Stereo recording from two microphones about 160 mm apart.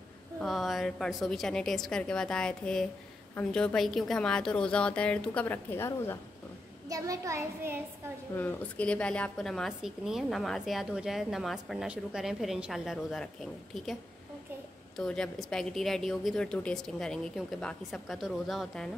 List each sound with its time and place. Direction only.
0.4 s a woman's voice: centre (ahead or behind)
6.9 s a child's voice: 20° right (ahead or behind)
8.4 s a woman's voice: 10° left (ahead or behind)
15.0 s a woman's voice: centre (ahead or behind)